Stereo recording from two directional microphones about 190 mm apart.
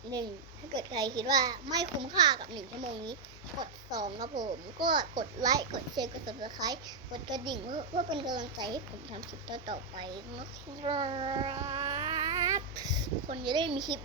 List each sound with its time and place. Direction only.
0.8 s a child's voice: 20° right (ahead or behind)
4.3 s a child's voice: 20° right (ahead or behind)
10.8 s child singing: 25° right (ahead or behind)